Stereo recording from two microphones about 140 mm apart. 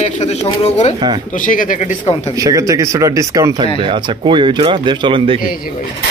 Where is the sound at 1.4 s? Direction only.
70° left (ahead or behind).